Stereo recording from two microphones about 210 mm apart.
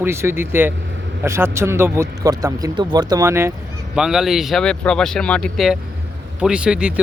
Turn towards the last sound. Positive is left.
turn(degrees=-5)  # may be behind; listen again after turning